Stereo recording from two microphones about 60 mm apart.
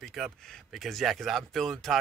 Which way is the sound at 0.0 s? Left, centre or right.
Centre.